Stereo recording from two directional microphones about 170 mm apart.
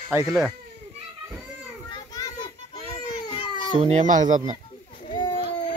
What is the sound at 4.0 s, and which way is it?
Speech, 45° right (ahead or behind).